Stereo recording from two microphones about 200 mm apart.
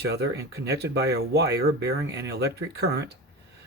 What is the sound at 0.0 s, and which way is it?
Speech, 55° right (ahead or behind).